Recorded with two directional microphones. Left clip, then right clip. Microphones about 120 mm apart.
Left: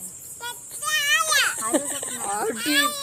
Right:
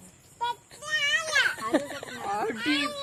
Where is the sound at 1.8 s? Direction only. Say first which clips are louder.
Left 3 dB; 10° left (ahead or behind).